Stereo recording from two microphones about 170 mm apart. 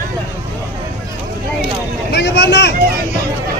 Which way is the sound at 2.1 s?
80° left.